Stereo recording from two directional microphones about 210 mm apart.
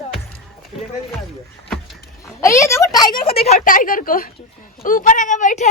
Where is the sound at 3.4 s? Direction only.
35° left (ahead or behind).